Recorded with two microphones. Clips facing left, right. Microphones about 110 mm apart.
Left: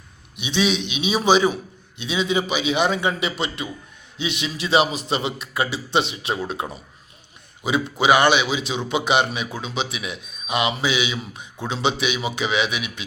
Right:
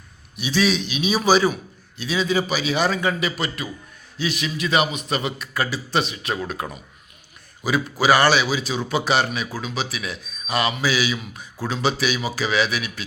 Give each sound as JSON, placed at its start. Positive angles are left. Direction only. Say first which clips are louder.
{"t": 0.3, "sound": "a man's voice", "louder": "right 1 dB", "side_deg": 25}